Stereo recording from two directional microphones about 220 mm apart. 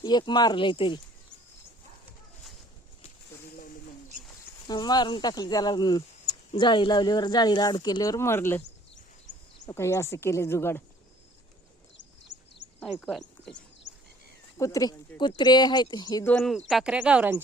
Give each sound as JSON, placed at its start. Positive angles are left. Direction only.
{"t": 0.0, "sound": "speech", "side_deg": 20}
{"t": 4.7, "sound": "speech", "side_deg": 20}
{"t": 9.3, "sound": "a sound", "side_deg": 35}
{"t": 9.6, "sound": "speech", "side_deg": 15}
{"t": 11.9, "sound": "a sound", "side_deg": 55}
{"t": 12.8, "sound": "speech", "side_deg": 0}
{"t": 14.6, "sound": "speech", "side_deg": 15}
{"t": 16.3, "sound": "speech", "side_deg": 5}